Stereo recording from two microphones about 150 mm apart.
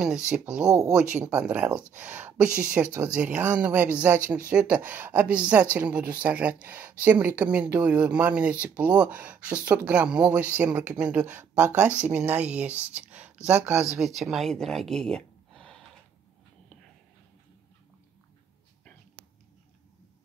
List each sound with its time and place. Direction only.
0.3 s speech: 5° right (ahead or behind)
0.7 s speech: 20° right (ahead or behind)
1.4 s speech: 10° right (ahead or behind)
13.9 s speech: centre (ahead or behind)